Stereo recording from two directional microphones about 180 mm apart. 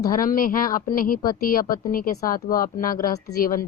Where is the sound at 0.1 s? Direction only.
50° left (ahead or behind).